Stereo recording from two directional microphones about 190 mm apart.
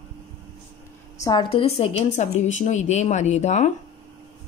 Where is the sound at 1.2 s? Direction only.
20° left (ahead or behind).